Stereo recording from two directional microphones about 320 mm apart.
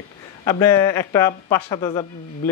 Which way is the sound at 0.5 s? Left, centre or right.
Centre.